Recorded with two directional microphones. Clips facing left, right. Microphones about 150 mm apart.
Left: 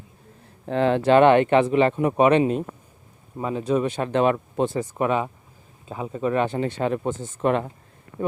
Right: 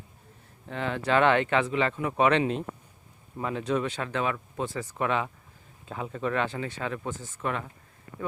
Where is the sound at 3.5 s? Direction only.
10° left (ahead or behind); by 7.7 s 30° left (ahead or behind).